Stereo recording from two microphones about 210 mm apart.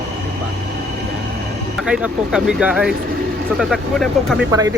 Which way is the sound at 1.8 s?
5° right (ahead or behind).